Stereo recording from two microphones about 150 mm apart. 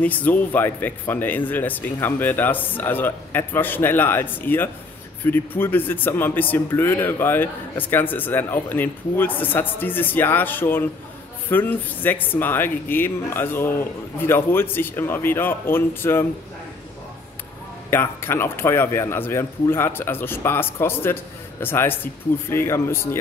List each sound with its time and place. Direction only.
0.0 s a man's voice: 10° left (ahead or behind)
17.8 s a man's voice: 15° left (ahead or behind)